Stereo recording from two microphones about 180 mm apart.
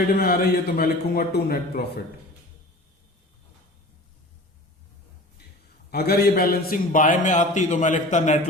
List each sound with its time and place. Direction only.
0.2 s a man's voice: 60° left (ahead or behind)
5.9 s a man's voice: 60° left (ahead or behind); by 8.4 s 40° left (ahead or behind)